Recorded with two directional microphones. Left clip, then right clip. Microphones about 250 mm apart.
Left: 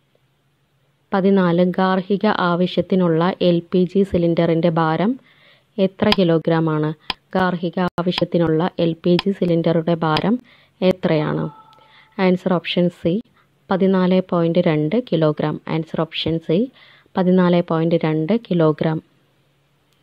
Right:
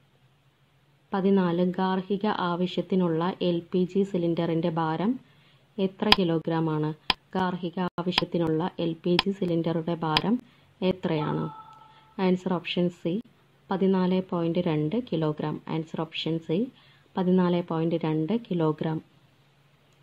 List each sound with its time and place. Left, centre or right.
1.1 s a woman's voice: left